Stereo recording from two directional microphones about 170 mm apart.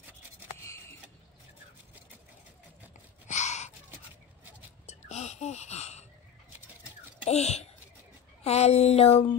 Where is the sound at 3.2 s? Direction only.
45° left (ahead or behind).